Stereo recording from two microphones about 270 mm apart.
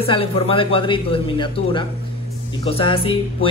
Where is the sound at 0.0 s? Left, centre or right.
Centre.